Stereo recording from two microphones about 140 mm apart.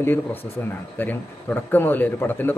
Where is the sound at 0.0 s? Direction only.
15° left (ahead or behind).